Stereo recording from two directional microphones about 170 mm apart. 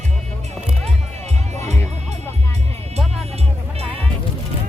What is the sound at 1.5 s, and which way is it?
Music, 40° right (ahead or behind).